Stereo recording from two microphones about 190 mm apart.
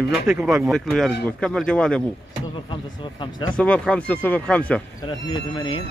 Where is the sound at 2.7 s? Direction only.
25° left (ahead or behind).